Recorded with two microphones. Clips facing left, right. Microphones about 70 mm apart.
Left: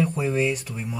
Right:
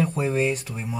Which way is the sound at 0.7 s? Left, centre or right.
Centre.